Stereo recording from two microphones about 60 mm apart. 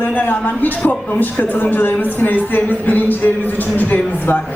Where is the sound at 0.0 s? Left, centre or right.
Left.